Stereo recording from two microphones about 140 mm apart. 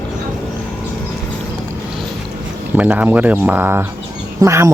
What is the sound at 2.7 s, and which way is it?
Speech, 10° right (ahead or behind).